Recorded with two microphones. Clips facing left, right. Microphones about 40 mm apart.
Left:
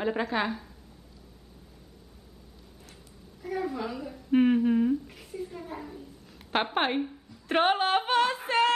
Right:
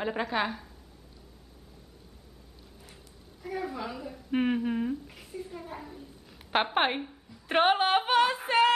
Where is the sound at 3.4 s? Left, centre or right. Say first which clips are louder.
Left 3 dB; centre.